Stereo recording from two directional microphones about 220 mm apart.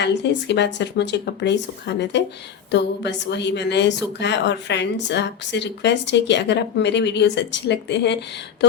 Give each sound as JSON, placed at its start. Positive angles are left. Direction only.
{"t": 0.0, "sound": "a woman's voice", "side_deg": 50}